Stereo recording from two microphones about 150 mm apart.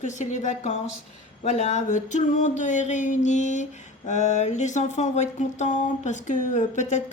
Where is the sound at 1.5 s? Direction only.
50° left (ahead or behind).